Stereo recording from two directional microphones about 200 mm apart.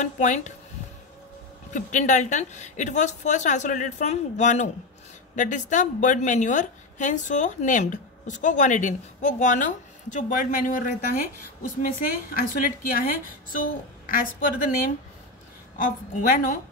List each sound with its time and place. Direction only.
0.0 s a woman's voice: 35° left (ahead or behind)
1.7 s a woman's voice: 40° left (ahead or behind)
12.4 s a woman's voice: 45° left (ahead or behind)
15.8 s a woman's voice: 40° left (ahead or behind)